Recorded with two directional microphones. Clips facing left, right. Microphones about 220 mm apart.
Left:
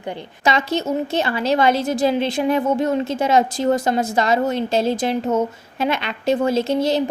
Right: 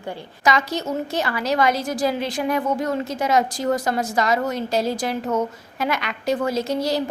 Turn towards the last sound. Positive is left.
turn(degrees=25)  # may be behind; listen again after turning